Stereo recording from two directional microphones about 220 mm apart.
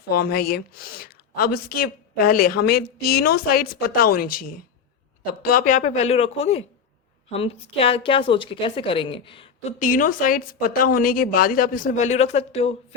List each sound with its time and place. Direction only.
0.1 s a woman's voice: 45° left (ahead or behind); by 12.7 s 30° left (ahead or behind)